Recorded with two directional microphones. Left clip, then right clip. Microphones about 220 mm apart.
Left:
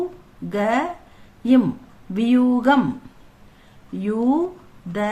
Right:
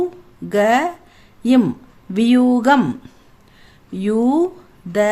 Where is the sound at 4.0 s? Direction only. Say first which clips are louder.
Right 4 dB; 40° right (ahead or behind).